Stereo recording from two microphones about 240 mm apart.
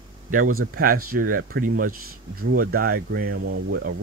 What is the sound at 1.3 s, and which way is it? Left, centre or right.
Speech, right.